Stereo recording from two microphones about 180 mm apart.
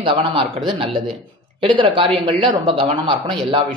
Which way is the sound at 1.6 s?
25° right (ahead or behind).